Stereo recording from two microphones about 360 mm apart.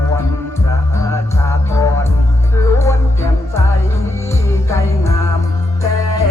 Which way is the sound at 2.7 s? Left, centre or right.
Centre.